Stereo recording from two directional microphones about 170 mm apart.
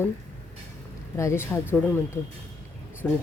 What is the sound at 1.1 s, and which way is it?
Speech, 15° left (ahead or behind).